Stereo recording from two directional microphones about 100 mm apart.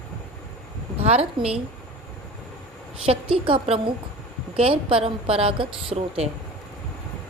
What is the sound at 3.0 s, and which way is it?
A woman's voice, 70° right (ahead or behind).